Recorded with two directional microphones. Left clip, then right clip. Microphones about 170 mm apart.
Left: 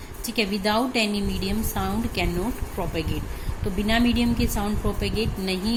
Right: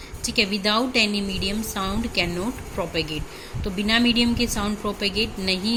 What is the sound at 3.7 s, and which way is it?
A woman's voice, 5° right (ahead or behind).